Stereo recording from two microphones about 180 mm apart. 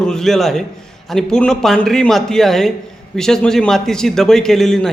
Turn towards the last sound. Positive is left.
turn(degrees=0)  # may be behind; listen again after turning